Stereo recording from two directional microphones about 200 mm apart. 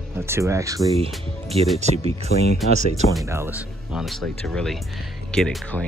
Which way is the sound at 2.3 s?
55° left (ahead or behind).